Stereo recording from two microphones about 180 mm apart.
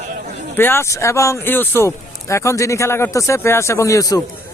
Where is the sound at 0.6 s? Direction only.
15° left (ahead or behind).